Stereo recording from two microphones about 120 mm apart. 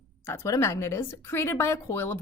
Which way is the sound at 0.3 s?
25° left (ahead or behind).